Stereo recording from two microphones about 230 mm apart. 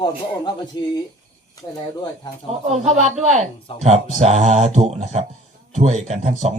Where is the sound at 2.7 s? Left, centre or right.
Right.